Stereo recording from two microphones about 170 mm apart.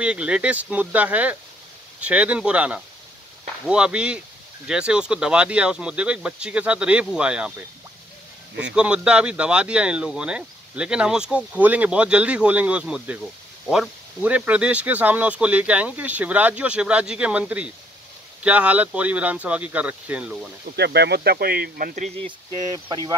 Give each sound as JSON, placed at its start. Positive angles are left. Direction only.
{"t": 0.0, "sound": "speech", "side_deg": -5}
{"t": 8.7, "sound": "speech", "side_deg": -5}
{"t": 20.7, "sound": "speech", "side_deg": -75}
{"t": 22.2, "sound": "speech", "side_deg": -25}